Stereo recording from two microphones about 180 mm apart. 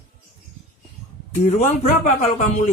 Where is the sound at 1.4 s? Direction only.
40° left (ahead or behind).